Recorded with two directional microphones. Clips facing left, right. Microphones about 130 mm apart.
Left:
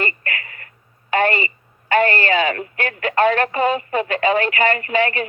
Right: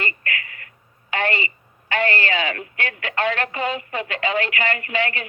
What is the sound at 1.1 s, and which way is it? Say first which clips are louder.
A woman's voice: left 6 dB; 45° left (ahead or behind).